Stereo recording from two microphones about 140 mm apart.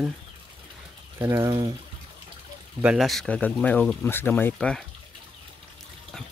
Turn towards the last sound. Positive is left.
turn(degrees=5)  # may be behind; listen again after turning